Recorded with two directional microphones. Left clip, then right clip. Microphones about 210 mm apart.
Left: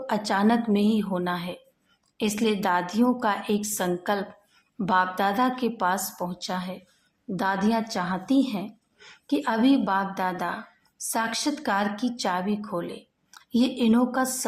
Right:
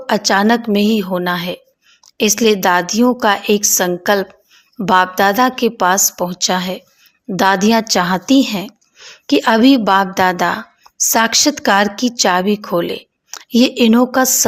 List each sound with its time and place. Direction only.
0.0 s a woman's voice: 30° right (ahead or behind)
9.0 s a sound: 20° right (ahead or behind)
9.2 s a woman's voice: 35° right (ahead or behind)